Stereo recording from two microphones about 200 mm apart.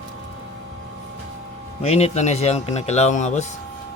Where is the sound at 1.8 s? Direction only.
30° left (ahead or behind).